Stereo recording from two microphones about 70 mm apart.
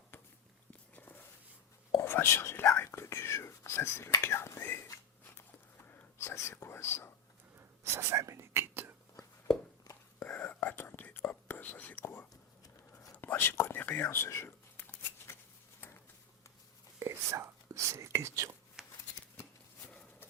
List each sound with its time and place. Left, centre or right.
0.7 s walk: left
2.0 s whispering: left
4.2 s speech: left
5.2 s a sound: left
6.1 s speech: left
7.9 s whispering: right
10.2 s whispering: left
13.2 s speech: left
14.3 s a sound: left
17.0 s whispering: right
18.8 s shuffling cards: centre